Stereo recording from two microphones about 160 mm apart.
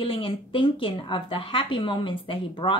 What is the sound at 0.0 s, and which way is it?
Speech, 35° left (ahead or behind).